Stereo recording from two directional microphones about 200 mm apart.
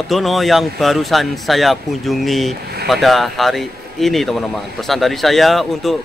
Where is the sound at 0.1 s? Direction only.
Centre (ahead or behind).